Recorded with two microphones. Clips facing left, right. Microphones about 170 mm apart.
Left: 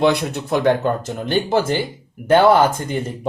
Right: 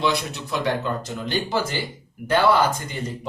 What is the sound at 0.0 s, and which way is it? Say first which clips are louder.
Speech: left 7 dB; 55° left (ahead or behind).